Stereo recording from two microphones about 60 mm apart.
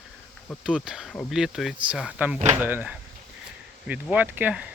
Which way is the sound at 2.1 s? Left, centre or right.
Right.